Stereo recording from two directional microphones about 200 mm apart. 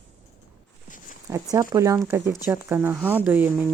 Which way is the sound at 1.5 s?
20° right (ahead or behind).